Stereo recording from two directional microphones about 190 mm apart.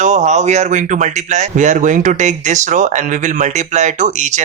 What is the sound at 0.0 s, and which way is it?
Speech, 40° right (ahead or behind).